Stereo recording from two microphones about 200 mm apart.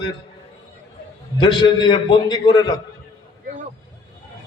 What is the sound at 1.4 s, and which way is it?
A man's voice, 25° left (ahead or behind).